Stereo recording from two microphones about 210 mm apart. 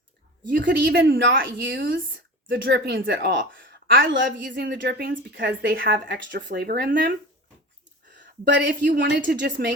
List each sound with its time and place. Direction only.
0.5 s speech: 50° right (ahead or behind)
1.6 s speech: 55° right (ahead or behind)
8.1 s speech: 55° right (ahead or behind)